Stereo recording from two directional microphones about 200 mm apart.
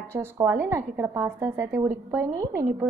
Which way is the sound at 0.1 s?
10° right (ahead or behind).